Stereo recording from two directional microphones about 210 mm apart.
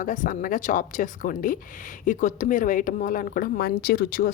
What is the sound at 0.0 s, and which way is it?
Speech, 40° left (ahead or behind).